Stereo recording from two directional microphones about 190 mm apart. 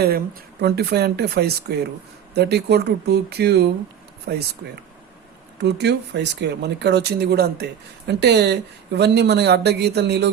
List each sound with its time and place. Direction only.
0.6 s speech: 60° right (ahead or behind)
5.6 s speech: 60° right (ahead or behind)